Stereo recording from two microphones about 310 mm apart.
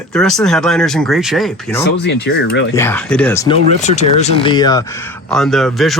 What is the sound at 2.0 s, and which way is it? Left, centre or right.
Speech, left.